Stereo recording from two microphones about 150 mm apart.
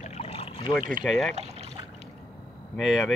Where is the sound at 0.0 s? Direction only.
45° left (ahead or behind).